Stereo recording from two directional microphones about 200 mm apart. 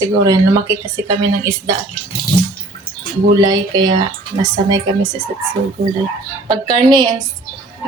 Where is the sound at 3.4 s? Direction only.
20° right (ahead or behind).